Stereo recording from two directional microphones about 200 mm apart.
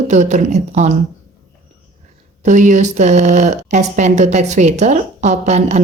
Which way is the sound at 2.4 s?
40° right (ahead or behind).